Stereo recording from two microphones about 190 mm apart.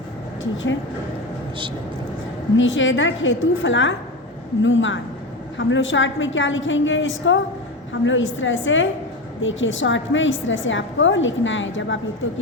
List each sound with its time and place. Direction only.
0.5 s a woman's voice: 80° left
2.6 s a woman's voice: 85° left